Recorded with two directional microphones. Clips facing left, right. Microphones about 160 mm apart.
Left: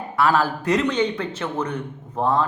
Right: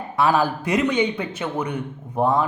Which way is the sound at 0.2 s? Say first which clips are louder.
Even; 15° right (ahead or behind).